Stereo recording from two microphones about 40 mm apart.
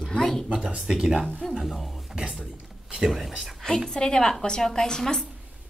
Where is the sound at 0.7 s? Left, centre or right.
Centre.